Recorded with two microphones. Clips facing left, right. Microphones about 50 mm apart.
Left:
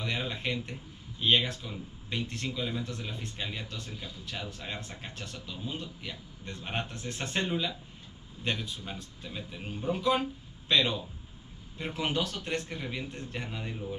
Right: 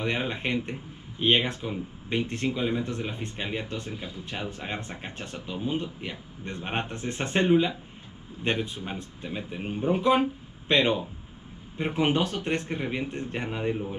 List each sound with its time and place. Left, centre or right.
0.0 s speech: right